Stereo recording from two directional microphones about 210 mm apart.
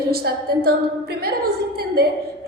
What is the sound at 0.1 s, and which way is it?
Speech, 50° right (ahead or behind).